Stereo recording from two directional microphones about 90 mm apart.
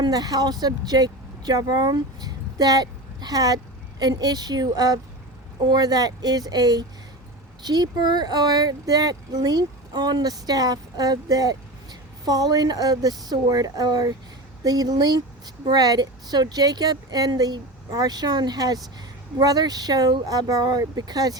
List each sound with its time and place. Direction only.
0.0 s speech: 45° right (ahead or behind)